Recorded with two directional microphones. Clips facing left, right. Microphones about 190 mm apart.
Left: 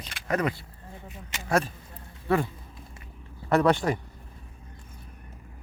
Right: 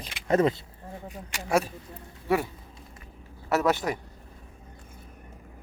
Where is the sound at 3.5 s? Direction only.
5° right (ahead or behind).